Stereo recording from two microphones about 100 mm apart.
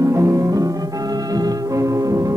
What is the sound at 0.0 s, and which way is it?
Music, 30° right (ahead or behind).